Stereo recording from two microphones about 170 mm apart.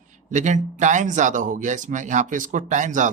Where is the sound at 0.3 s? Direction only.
45° right (ahead or behind).